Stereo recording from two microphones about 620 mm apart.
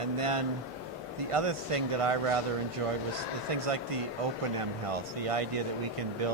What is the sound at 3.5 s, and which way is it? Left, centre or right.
Speech, right.